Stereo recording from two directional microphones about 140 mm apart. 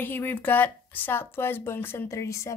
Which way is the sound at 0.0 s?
15° left (ahead or behind).